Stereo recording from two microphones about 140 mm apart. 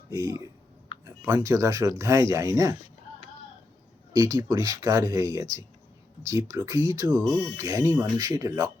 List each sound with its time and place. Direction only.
0.1 s speech: 25° right (ahead or behind)
4.1 s speech: 25° right (ahead or behind)